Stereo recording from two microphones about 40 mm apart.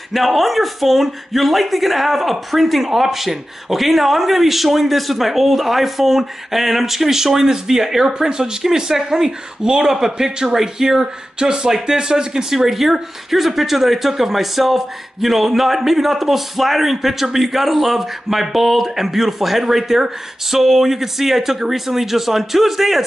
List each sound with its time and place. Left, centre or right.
0.1 s speech: centre
12.5 s speech: centre